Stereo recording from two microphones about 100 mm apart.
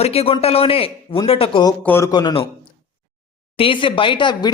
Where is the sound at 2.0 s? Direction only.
40° left (ahead or behind).